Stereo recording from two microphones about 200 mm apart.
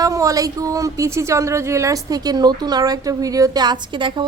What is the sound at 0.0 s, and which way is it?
A woman's voice, 15° right (ahead or behind).